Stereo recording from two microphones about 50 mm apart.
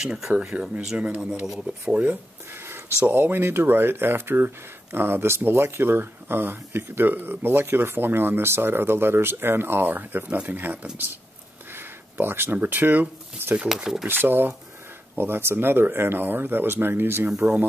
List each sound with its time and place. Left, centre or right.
0.0 s speech: centre
0.3 s speech: right
1.4 s speech: centre
1.7 s speech: right
2.5 s a sound: right
3.1 s speech: right
10.2 s speech: right
11.7 s a sound: right
12.5 s speech: right
13.7 s speech: centre
14.0 s speech: right